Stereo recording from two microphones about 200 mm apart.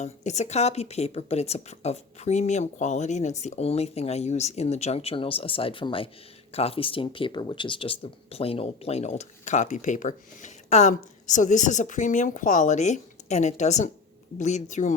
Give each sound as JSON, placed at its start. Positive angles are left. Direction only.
{"t": 0.0, "sound": "speech", "side_deg": 35}